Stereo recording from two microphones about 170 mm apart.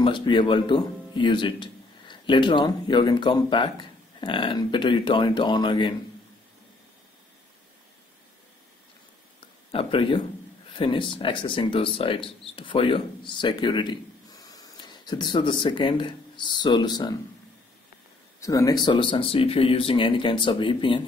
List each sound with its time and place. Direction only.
0.0 s speech: 30° left (ahead or behind)
9.7 s speech: 30° left (ahead or behind)
18.4 s speech: 20° left (ahead or behind)